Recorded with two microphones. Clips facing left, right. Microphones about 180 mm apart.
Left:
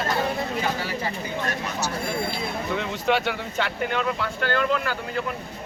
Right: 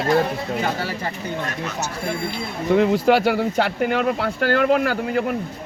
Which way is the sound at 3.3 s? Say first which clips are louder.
Right 8 dB; 65° right (ahead or behind).